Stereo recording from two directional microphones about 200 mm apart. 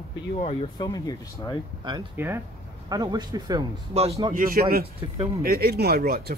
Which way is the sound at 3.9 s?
30° right (ahead or behind).